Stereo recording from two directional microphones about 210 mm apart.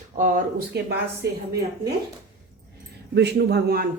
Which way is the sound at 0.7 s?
50° right (ahead or behind).